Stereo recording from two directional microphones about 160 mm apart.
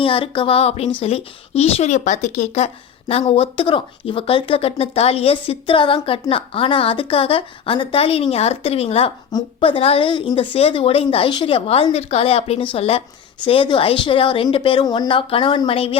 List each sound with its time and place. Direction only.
0.0 s speech: 35° left (ahead or behind)